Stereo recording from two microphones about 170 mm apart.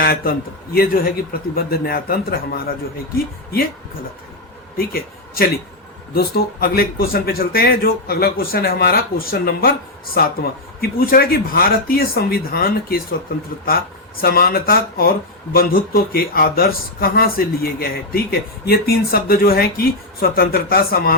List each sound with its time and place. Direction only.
0.0 s speech: 60° left (ahead or behind)
4.9 s a man's voice: 60° left (ahead or behind)
14.2 s speech: 60° left (ahead or behind)